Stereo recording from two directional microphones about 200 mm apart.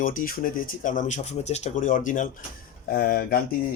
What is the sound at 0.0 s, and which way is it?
Speech, 45° left (ahead or behind).